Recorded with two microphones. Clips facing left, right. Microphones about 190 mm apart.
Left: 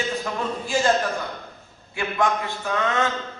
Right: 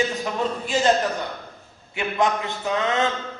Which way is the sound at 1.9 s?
20° right (ahead or behind).